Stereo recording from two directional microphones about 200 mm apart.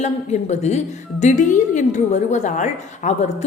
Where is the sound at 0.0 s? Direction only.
35° left (ahead or behind).